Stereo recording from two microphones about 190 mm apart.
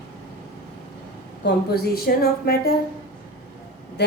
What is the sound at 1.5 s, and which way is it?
A woman's voice, 55° left (ahead or behind).